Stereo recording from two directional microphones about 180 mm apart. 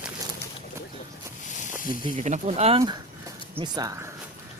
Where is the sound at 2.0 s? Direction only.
40° right (ahead or behind).